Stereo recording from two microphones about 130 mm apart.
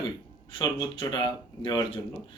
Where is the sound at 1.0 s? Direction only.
40° left (ahead or behind).